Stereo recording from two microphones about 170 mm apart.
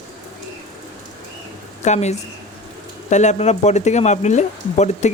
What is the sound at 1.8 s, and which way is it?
Speech, 40° left (ahead or behind).